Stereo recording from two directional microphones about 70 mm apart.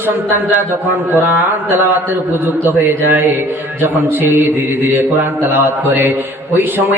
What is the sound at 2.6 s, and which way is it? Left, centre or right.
A man's voice, right.